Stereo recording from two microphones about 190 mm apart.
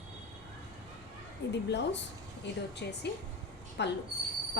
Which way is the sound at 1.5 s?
65° left (ahead or behind).